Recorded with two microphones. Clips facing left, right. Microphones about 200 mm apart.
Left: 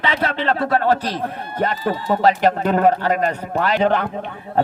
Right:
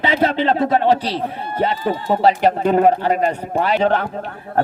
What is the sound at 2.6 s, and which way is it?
Speech, 10° right (ahead or behind).